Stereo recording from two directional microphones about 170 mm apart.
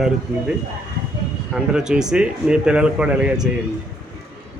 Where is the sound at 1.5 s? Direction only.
5° right (ahead or behind).